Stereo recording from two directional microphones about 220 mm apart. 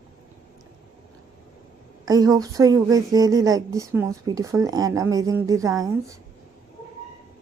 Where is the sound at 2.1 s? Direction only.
15° right (ahead or behind).